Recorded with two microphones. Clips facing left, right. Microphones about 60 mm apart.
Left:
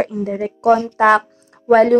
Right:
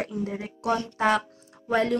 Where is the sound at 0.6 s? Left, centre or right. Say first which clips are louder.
Left 11 dB; left.